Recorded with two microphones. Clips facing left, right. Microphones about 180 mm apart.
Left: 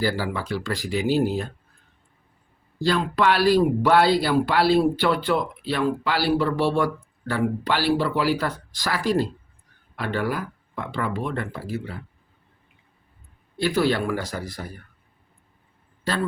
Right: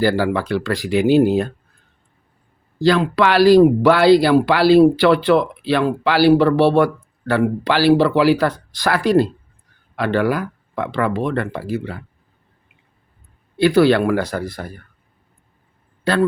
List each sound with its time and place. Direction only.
0.0 s speech: 65° right (ahead or behind)
2.8 s speech: 90° right; by 9.2 s 65° right (ahead or behind)
9.9 s speech: 85° right; by 11.9 s 70° right (ahead or behind)
13.6 s speech: 70° right (ahead or behind)